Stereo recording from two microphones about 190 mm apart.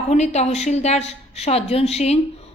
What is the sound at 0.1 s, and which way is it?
A woman's voice, 35° left (ahead or behind).